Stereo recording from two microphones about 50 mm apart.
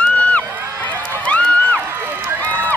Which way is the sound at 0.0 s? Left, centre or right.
Left.